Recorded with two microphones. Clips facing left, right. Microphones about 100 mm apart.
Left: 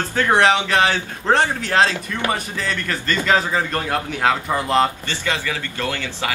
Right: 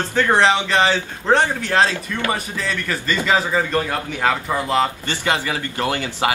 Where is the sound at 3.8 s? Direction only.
Centre (ahead or behind).